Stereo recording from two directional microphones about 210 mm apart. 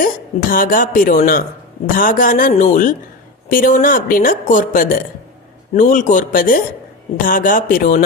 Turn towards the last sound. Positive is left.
turn(degrees=40)  # may be behind; listen again after turning